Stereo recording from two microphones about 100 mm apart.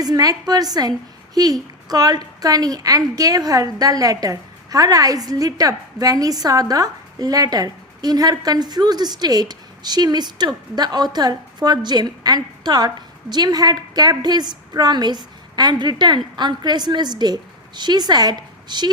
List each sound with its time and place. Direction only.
0.0 s a woman's voice: 40° right (ahead or behind)